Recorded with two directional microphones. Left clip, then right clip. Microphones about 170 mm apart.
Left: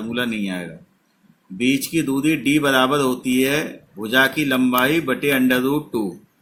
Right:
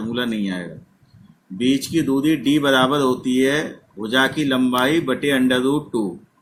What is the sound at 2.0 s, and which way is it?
Speech, 35° left (ahead or behind).